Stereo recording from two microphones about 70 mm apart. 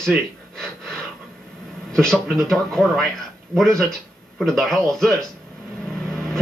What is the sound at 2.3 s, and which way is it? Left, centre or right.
A man's voice, centre.